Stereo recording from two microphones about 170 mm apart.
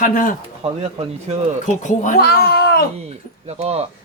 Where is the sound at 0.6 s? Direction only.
35° right (ahead or behind).